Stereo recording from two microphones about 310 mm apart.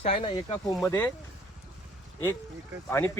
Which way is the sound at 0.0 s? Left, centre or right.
Centre.